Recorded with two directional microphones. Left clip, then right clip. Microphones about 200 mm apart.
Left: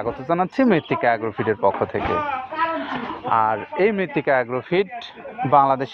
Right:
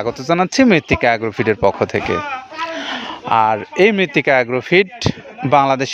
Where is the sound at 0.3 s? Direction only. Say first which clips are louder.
Right 6 dB; 70° right (ahead or behind).